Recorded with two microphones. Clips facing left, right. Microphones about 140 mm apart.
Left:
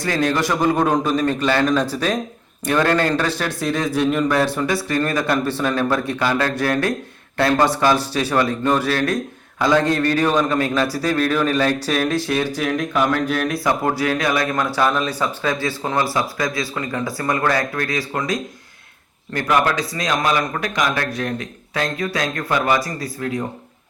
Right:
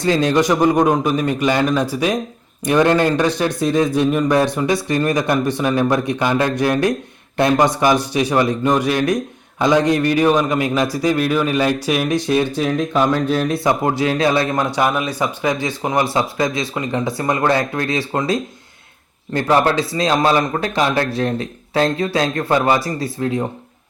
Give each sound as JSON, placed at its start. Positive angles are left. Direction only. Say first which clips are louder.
{"t": 0.0, "sound": "a man's voice", "louder": "right 4 dB", "side_deg": -20}
{"t": 14.8, "sound": "a man's voice", "louder": "left 1 dB", "side_deg": -15}